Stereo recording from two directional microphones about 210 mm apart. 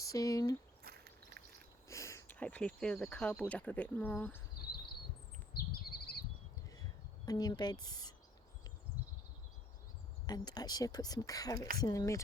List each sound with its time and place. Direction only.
0.0 s speech: 15° left (ahead or behind)
0.8 s a sound: 45° right (ahead or behind)
1.9 s speech: 15° left (ahead or behind)
4.6 s a sound: 50° left (ahead or behind)
5.9 s bird: 50° left (ahead or behind)
7.3 s speech: 20° left (ahead or behind)
10.2 s speech: 20° left (ahead or behind)